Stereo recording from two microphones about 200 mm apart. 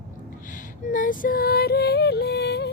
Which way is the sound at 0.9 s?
40° left (ahead or behind).